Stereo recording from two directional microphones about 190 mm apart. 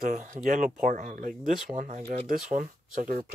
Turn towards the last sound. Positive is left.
turn(degrees=-45)  # may be behind; listen again after turning